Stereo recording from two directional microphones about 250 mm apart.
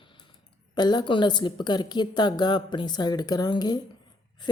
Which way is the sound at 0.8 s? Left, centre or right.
Centre.